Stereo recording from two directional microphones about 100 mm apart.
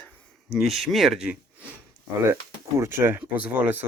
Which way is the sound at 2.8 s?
25° right (ahead or behind).